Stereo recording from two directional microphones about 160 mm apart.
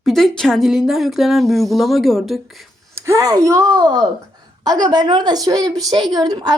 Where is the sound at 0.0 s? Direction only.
Centre (ahead or behind).